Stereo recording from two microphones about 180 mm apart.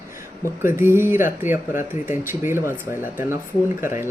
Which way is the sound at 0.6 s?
15° right (ahead or behind).